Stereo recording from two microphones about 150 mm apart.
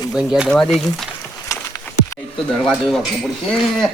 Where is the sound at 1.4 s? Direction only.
20° left (ahead or behind).